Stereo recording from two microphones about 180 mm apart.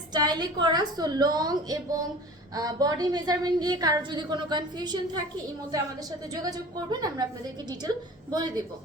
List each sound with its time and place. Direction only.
0.1 s a woman's voice: 20° right (ahead or behind)